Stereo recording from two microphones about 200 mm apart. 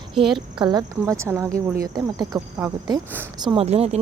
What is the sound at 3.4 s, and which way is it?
Speech, 30° right (ahead or behind).